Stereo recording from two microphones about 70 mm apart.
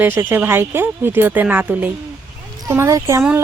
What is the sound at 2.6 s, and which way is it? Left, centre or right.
Speech, right.